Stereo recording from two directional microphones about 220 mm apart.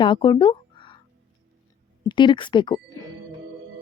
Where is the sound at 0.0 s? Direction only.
20° left (ahead or behind).